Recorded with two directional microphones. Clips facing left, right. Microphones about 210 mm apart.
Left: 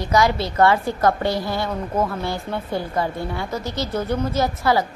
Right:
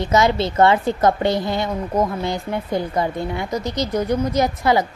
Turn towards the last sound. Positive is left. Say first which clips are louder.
# right 2 dB
turn(degrees=-20)  # may be behind; listen again after turning